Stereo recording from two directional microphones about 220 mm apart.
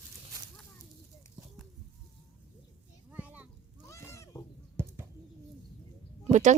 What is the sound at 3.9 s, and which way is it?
Cat, 15° left (ahead or behind).